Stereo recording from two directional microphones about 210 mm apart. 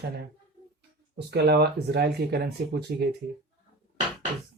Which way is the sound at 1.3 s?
50° right (ahead or behind).